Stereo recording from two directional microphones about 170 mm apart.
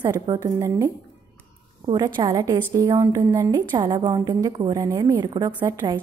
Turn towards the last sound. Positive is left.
turn(degrees=-20)  # may be behind; listen again after turning